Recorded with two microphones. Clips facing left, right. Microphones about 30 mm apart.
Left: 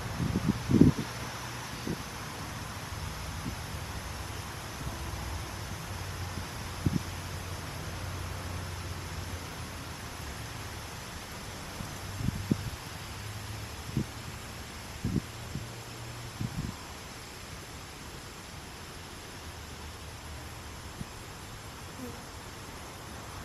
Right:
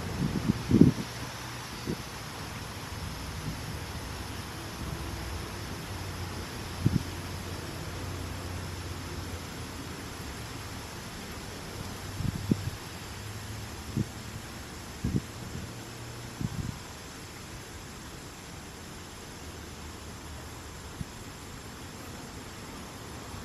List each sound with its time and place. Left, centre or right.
0.0 s vehicle: centre
5.0 s vehicle: centre
5.3 s vehicle: right
6.3 s vehicle: centre
7.8 s vehicle: centre